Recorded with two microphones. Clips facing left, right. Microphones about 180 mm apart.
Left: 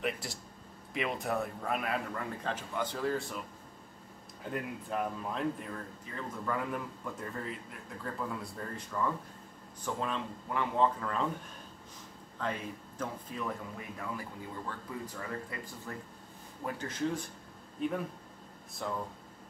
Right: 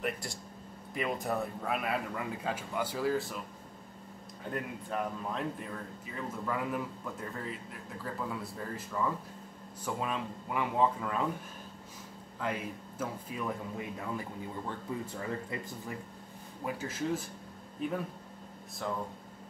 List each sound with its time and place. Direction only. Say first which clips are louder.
0.0 s speech: even; centre (ahead or behind)
4.5 s speech: even; centre (ahead or behind)
12.4 s speech: right 1 dB; 5° right (ahead or behind)
15.0 s speech: right 3 dB; 25° right (ahead or behind)
16.6 s speech: even; 5° right (ahead or behind)